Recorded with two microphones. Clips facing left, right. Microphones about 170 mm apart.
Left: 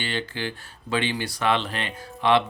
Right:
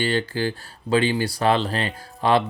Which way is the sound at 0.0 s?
40° right (ahead or behind).